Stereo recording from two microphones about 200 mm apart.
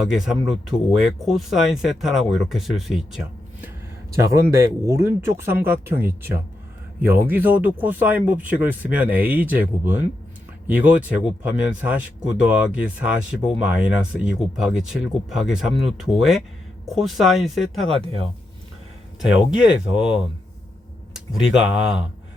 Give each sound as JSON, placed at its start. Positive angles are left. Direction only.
{"t": 0.1, "sound": "speech", "side_deg": 0}
{"t": 4.1, "sound": "speech", "side_deg": -15}
{"t": 17.8, "sound": "speech", "side_deg": -30}
{"t": 19.5, "sound": "speech", "side_deg": -5}
{"t": 21.4, "sound": "speech", "side_deg": -5}